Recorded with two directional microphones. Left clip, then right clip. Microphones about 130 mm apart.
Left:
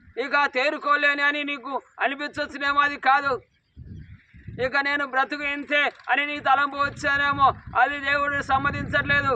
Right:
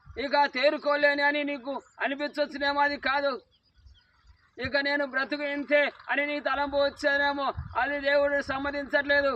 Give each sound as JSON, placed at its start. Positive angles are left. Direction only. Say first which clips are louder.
{"t": 0.2, "sound": "a man's voice", "louder": "left 2 dB", "side_deg": -30}
{"t": 4.5, "sound": "a man's voice", "louder": "left 4 dB", "side_deg": -30}
{"t": 6.1, "sound": "a sound", "louder": "left 7 dB", "side_deg": -30}
{"t": 7.0, "sound": "a man's voice", "louder": "left 6 dB", "side_deg": -25}